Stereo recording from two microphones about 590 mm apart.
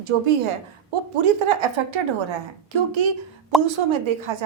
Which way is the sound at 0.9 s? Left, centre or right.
Right.